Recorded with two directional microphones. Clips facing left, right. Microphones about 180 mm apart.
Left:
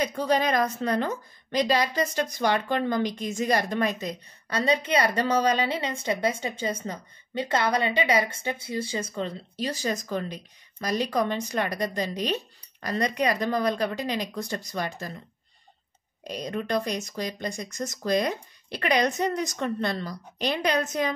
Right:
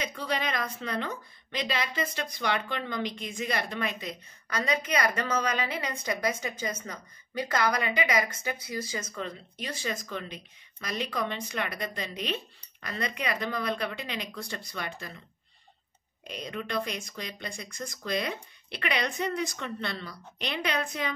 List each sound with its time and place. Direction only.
0.0 s a woman's voice: 45° left (ahead or behind)
16.3 s a woman's voice: 40° left (ahead or behind)